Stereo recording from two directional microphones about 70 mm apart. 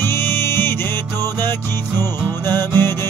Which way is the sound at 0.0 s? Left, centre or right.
Left.